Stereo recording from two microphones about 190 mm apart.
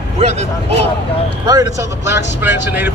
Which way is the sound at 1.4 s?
15° right (ahead or behind).